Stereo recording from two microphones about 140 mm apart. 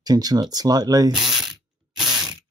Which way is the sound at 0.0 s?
30° right (ahead or behind).